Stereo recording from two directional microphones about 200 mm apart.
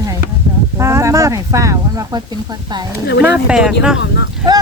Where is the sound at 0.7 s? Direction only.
15° right (ahead or behind).